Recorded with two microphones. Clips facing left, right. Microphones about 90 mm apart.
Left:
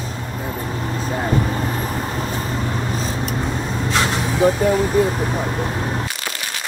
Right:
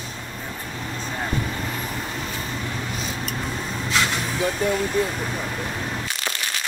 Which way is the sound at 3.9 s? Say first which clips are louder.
Left 3 dB; 40° left (ahead or behind).